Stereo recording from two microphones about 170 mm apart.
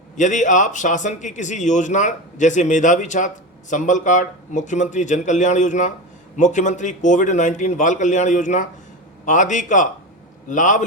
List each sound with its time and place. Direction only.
0.2 s speech: 45° left (ahead or behind)